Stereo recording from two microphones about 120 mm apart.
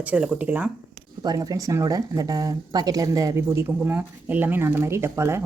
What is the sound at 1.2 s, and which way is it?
Speech, 30° right (ahead or behind).